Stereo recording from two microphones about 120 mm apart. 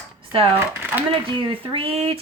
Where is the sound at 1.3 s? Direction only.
45° right (ahead or behind).